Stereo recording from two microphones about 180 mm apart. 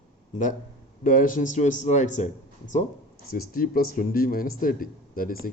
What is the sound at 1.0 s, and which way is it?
Speech, 50° left (ahead or behind).